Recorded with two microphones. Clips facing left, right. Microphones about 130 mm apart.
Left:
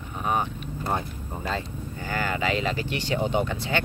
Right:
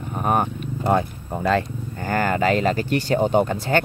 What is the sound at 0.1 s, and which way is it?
Vehicle, 50° right (ahead or behind).